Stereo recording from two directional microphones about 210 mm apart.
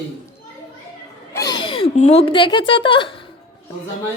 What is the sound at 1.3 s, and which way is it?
A woman's voice, 15° left (ahead or behind).